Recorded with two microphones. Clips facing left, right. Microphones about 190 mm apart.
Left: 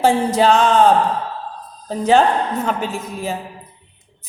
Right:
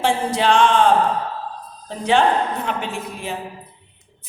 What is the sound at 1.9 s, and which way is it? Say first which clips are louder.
A woman's voice: left 3 dB; 40° left (ahead or behind).